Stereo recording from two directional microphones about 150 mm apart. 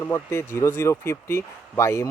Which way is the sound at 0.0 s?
20° left (ahead or behind).